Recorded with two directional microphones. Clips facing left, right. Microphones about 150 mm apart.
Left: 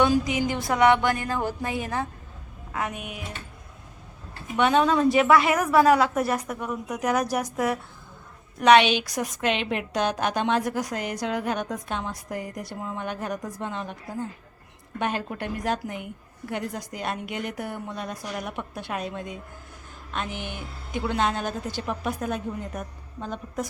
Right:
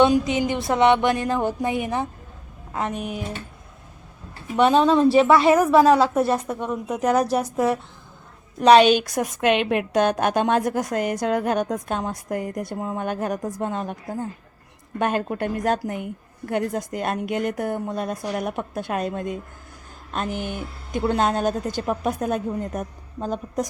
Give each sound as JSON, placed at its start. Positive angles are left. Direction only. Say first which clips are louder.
{"t": 0.0, "sound": "a woman's voice", "louder": "right 4 dB", "side_deg": -25}
{"t": 2.7, "sound": "speech", "louder": "right 5 dB", "side_deg": -30}
{"t": 4.5, "sound": "a woman's voice", "louder": "right 4 dB", "side_deg": -30}
{"t": 14.9, "sound": "a woman's voice", "louder": "right 5 dB", "side_deg": -50}